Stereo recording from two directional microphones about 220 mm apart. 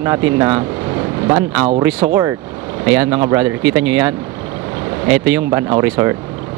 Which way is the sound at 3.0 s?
15° right (ahead or behind).